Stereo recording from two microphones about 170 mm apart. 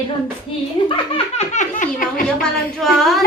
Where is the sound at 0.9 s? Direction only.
35° left (ahead or behind).